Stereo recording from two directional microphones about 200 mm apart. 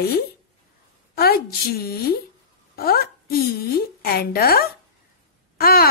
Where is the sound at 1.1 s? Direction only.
50° left (ahead or behind).